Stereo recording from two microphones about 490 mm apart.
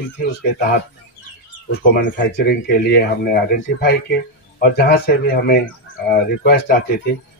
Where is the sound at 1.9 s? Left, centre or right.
Left.